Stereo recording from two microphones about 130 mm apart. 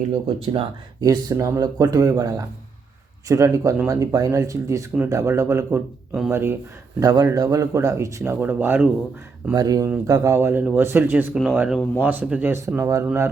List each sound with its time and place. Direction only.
0.1 s speech: 40° right (ahead or behind)
1.0 s speech: 25° right (ahead or behind)
7.0 s speech: 30° right (ahead or behind)
9.6 s speech: 30° right (ahead or behind)